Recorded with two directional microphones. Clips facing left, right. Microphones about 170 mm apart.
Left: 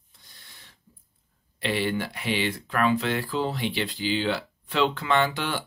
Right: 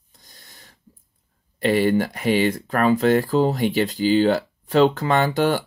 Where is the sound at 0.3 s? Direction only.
40° right (ahead or behind).